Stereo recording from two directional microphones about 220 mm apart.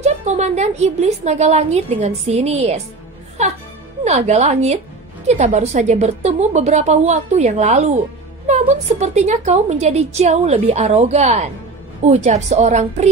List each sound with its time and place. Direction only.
0.0 s a woman's voice: 30° right (ahead or behind)
4.0 s a woman's voice: 30° right (ahead or behind)